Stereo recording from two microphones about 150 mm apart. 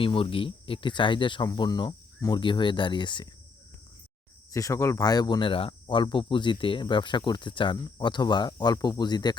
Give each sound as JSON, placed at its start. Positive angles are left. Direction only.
{"t": 0.0, "sound": "speech", "side_deg": 35}
{"t": 4.5, "sound": "speech", "side_deg": 20}